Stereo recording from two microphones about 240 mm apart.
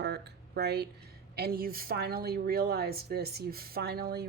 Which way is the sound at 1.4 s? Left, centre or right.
Right.